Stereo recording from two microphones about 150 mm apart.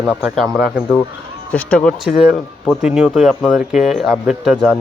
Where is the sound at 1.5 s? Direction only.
10° left (ahead or behind).